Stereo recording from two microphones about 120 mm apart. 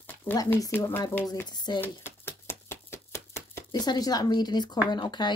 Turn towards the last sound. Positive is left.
turn(degrees=40)  # may be behind; listen again after turning